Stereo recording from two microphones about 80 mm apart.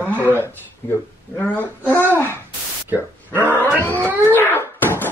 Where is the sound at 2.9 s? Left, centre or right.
Right.